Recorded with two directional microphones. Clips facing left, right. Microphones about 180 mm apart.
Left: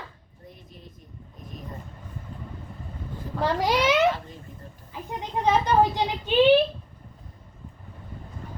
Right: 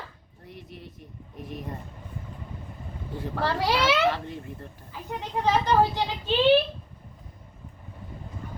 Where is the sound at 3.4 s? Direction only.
15° left (ahead or behind).